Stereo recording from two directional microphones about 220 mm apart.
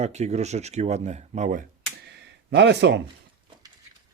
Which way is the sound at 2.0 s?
50° right (ahead or behind).